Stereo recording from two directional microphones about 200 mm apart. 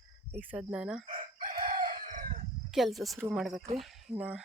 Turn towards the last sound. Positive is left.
turn(degrees=-5)  # may be behind; listen again after turning